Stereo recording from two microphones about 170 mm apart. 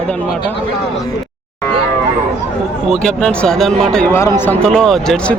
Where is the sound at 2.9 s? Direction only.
5° left (ahead or behind).